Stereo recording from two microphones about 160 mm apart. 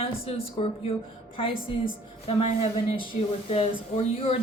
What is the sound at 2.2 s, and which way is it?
Speech, 40° left (ahead or behind).